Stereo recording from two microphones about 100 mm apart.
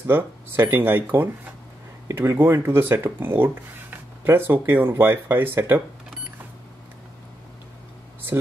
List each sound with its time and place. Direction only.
0.0 s speech: 25° right (ahead or behind)